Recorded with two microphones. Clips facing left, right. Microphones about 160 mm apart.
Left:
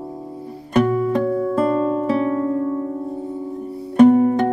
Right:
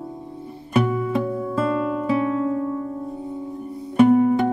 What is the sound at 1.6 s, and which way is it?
Music, 45° left (ahead or behind).